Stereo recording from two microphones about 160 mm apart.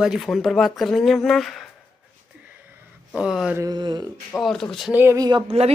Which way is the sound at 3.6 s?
25° right (ahead or behind).